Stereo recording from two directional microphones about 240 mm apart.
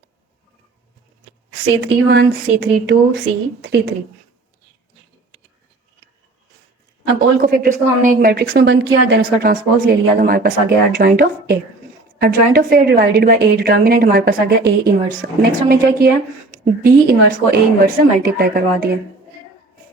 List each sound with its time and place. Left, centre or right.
1.8 s speech: right
7.4 s a woman's voice: right